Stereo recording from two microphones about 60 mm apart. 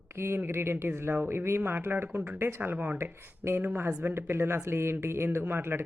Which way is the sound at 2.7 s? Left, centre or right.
Right.